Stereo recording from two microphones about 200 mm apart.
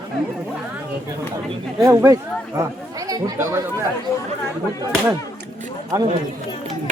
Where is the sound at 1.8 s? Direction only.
15° right (ahead or behind).